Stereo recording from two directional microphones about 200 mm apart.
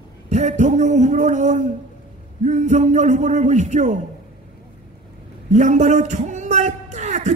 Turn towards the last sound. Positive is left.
turn(degrees=-35)  # may be behind; listen again after turning